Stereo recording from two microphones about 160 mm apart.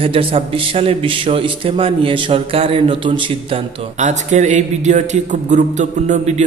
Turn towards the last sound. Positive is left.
turn(degrees=-45)  # may be behind; listen again after turning